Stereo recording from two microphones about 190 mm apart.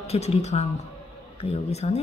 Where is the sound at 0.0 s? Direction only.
35° left (ahead or behind).